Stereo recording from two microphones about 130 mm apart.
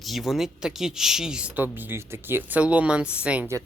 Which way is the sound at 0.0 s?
Centre (ahead or behind).